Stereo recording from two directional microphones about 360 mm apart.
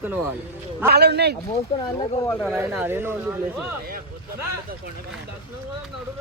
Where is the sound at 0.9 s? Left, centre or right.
Right.